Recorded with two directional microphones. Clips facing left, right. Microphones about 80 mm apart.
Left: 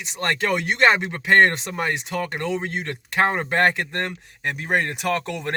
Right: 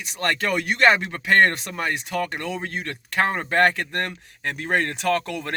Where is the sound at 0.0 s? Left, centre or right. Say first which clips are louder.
Even; left.